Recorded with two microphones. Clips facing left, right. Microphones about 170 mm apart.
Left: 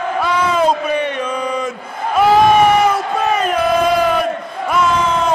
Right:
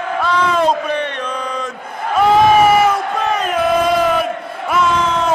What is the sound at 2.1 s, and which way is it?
Crowd, centre (ahead or behind).